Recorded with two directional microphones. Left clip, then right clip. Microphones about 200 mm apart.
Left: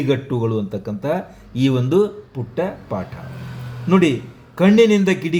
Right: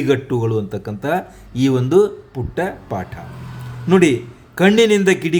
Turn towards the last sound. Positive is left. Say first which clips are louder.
# right 3 dB
turn(degrees=-25)  # may be behind; listen again after turning